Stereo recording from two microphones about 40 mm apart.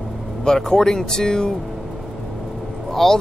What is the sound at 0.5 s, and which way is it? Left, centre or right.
Speech, centre.